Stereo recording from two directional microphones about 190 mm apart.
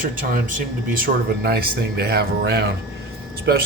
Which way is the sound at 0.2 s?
45° right (ahead or behind).